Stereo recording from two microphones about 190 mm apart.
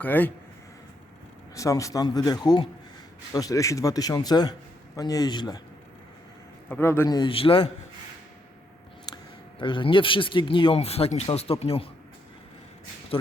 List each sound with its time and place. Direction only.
0.0 s a man's voice: 10° left (ahead or behind)
1.5 s speech: 15° left (ahead or behind)
6.7 s speech: 10° left (ahead or behind); by 7.7 s 30° left (ahead or behind)
9.1 s a sound: 20° left (ahead or behind)
9.6 s speech: 25° left (ahead or behind)